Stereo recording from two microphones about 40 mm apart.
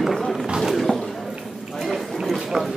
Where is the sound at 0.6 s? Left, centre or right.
Centre.